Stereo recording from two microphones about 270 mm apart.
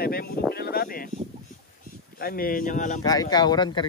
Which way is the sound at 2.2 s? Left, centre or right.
Left.